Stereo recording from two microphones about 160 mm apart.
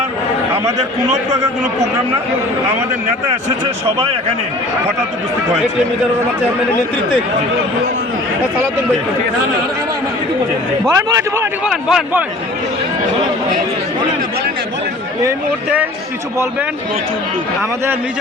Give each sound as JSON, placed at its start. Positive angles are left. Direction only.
{"t": 0.5, "sound": "a man's voice", "side_deg": -20}
{"t": 10.8, "sound": "a man's voice", "side_deg": -20}
{"t": 11.6, "sound": "speech", "side_deg": -5}